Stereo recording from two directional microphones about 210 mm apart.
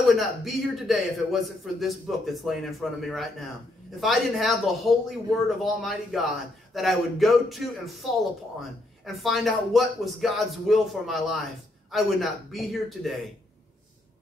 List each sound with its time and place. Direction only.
0.1 s a man's voice: centre (ahead or behind)